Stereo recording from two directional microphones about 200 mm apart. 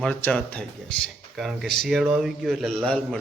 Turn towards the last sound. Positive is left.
turn(degrees=5)  # may be behind; listen again after turning